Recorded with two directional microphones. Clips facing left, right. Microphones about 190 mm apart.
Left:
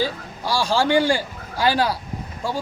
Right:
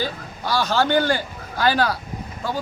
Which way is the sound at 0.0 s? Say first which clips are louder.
Left 2 dB; 30° left (ahead or behind).